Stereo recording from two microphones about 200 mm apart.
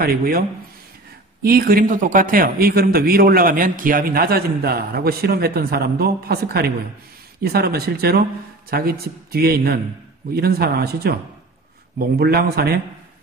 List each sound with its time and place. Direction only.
0.0 s a man's voice: 50° right (ahead or behind)